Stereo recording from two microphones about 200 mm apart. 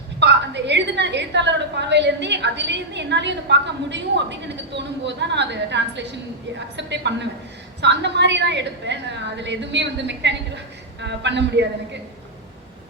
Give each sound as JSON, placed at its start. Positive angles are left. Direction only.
{"t": 0.2, "sound": "a woman's voice", "side_deg": -60}